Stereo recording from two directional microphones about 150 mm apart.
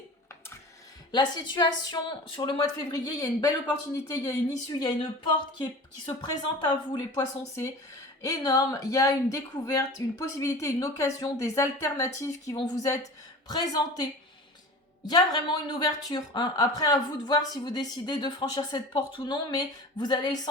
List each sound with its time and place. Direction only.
1.1 s a woman's voice: 30° left (ahead or behind)